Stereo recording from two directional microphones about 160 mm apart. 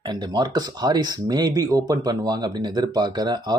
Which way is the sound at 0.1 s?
25° right (ahead or behind).